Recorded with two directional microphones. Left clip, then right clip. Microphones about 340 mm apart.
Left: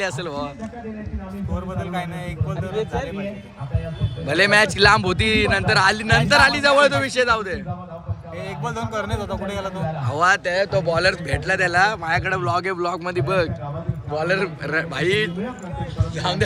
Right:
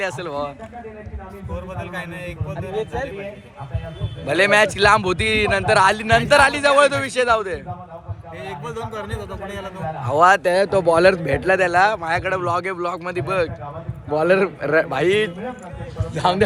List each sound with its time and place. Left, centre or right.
0.0 s speech: centre
4.3 s speech: centre
10.0 s speech: centre
14.2 s a man's voice: centre